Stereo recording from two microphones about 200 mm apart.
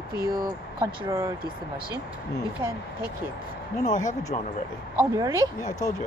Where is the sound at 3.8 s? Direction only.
40° left (ahead or behind).